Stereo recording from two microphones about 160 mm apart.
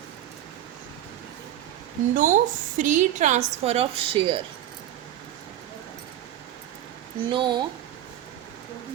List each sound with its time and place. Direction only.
2.1 s a woman's voice: 50° right (ahead or behind); by 4.4 s 35° right (ahead or behind)
7.3 s speech: 30° right (ahead or behind)